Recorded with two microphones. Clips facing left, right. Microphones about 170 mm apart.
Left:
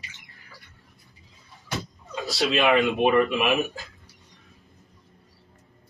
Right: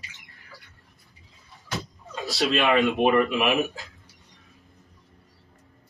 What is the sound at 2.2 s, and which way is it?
Speech, centre (ahead or behind).